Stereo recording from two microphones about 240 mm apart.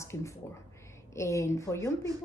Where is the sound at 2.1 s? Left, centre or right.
Centre.